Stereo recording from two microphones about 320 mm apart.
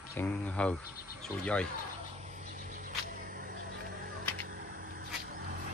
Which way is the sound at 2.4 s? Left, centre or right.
Right.